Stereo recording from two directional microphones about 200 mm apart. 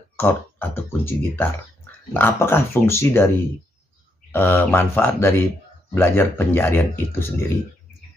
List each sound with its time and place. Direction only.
0.1 s speech: 10° left (ahead or behind)
4.3 s speech: 10° left (ahead or behind)